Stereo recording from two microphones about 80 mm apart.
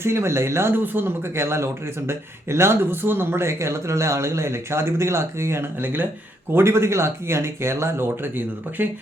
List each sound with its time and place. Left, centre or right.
0.0 s speech: right